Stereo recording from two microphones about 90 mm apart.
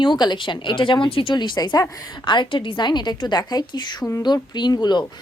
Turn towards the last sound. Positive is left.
turn(degrees=50)  # may be behind; listen again after turning